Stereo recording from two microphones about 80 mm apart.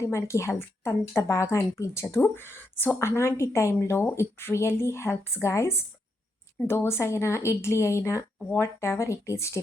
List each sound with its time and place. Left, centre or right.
0.0 s a woman's voice: left